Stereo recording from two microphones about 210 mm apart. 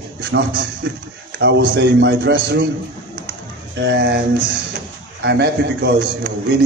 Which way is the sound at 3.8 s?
55° right (ahead or behind).